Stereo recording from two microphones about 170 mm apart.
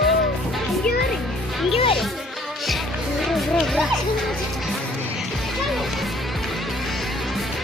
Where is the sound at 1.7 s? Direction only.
30° left (ahead or behind).